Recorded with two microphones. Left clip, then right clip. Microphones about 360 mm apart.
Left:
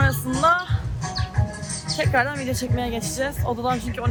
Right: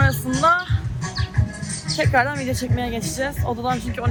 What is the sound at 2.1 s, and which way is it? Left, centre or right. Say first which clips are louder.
Speech: right 2 dB; centre.